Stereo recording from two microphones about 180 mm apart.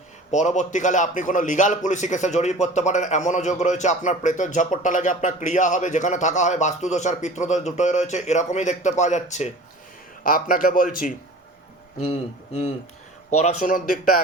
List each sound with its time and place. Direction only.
0.3 s a man's voice: 40° left (ahead or behind)
11.9 s a man's voice: 40° left (ahead or behind)
13.4 s speech: 50° left (ahead or behind)